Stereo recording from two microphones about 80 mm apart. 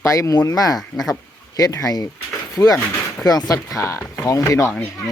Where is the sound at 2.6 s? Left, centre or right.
Left.